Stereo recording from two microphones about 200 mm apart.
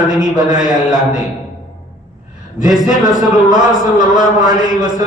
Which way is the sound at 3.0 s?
20° right (ahead or behind).